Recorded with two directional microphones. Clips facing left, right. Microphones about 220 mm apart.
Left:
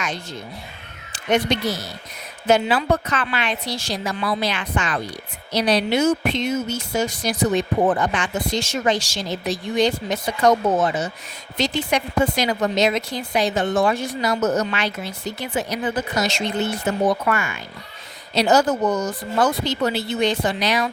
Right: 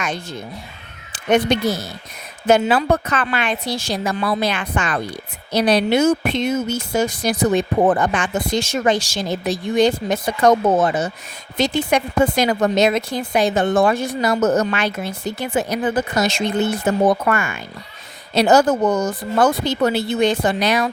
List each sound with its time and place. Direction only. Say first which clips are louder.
0.0 s speech: right 3 dB; 55° right (ahead or behind)